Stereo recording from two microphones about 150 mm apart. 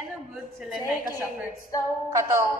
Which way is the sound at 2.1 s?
20° right (ahead or behind).